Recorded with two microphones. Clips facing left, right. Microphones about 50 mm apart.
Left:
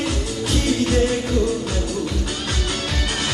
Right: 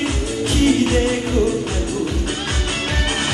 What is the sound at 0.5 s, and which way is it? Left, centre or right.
Music, right.